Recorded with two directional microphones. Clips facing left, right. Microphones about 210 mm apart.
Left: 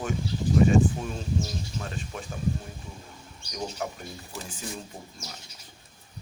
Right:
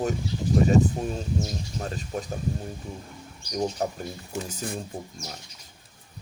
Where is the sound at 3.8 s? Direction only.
40° right (ahead or behind).